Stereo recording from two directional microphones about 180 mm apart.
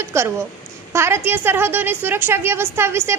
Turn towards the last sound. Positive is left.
turn(degrees=-15)  # may be behind; listen again after turning